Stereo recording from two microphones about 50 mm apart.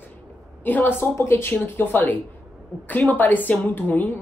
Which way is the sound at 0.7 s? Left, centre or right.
Left.